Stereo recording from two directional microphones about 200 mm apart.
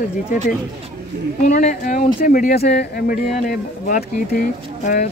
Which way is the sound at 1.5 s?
40° left (ahead or behind).